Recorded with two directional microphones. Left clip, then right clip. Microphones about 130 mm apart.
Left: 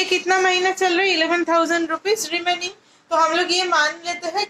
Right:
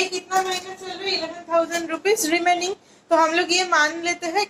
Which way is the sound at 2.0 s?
10° left (ahead or behind).